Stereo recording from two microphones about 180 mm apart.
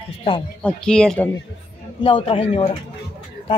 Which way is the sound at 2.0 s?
30° left (ahead or behind).